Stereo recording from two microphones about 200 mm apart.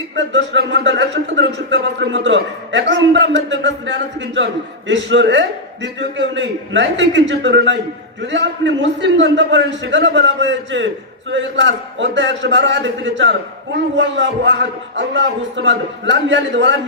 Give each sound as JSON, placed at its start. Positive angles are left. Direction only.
{"t": 0.1, "sound": "a man's voice", "side_deg": -60}